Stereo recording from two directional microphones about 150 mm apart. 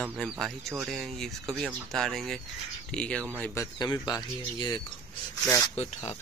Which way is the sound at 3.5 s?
25° left (ahead or behind).